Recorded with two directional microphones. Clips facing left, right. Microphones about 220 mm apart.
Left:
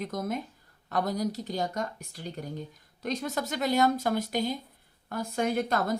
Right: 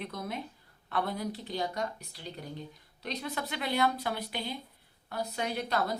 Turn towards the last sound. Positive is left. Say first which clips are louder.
# left 5 dB
turn(degrees=50)  # may be behind; listen again after turning